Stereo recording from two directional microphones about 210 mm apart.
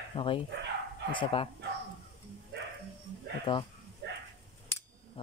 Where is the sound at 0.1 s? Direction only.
25° left (ahead or behind).